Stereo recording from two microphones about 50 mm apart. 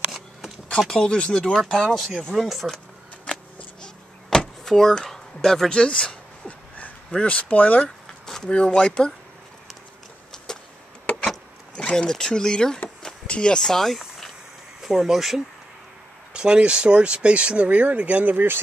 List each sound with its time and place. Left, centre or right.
0.9 s speech: centre
3.3 s power windows: centre
7.1 s speech: left
8.3 s speech: centre
10.3 s a sound: centre
11.7 s speech: centre
13.0 s walk: centre
14.8 s speech: centre
16.3 s speech: centre; by 18.6 s right